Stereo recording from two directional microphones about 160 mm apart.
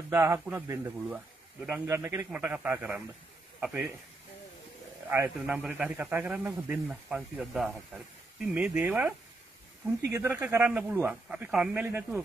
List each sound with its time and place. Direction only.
0.1 s a man's voice: 15° right (ahead or behind)
5.5 s a man's voice: 5° right (ahead or behind)